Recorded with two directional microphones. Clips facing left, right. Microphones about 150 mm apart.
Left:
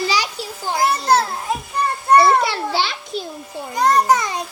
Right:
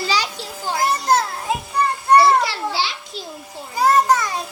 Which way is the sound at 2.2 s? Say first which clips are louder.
Left 1 dB; 55° left (ahead or behind).